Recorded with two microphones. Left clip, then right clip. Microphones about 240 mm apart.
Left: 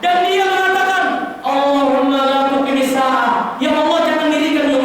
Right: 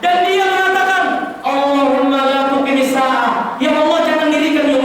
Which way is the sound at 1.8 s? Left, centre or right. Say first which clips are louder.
Right 1 dB; right.